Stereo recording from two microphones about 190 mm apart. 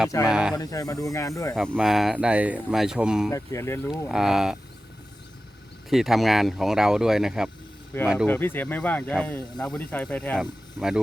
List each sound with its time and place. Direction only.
0.3 s speech: 5° right (ahead or behind)
0.5 s speech: 20° left (ahead or behind)
1.5 s speech: centre (ahead or behind)
3.2 s speech: 15° left (ahead or behind)
4.1 s speech: centre (ahead or behind)
5.9 s speech: centre (ahead or behind)
8.3 s speech: 10° left (ahead or behind)